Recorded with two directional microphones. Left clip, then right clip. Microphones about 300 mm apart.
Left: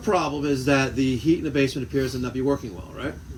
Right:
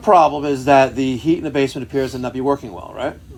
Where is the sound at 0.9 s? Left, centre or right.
Centre.